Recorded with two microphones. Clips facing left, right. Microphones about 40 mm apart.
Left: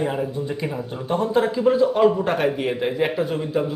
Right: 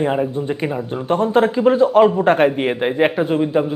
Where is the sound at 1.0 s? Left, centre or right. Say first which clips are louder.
Right 5 dB; right.